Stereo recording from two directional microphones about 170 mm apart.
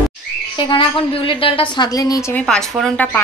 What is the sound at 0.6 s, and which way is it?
A woman's voice, 30° left (ahead or behind).